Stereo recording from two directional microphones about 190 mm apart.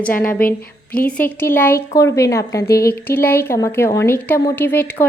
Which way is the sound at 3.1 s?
10° left (ahead or behind).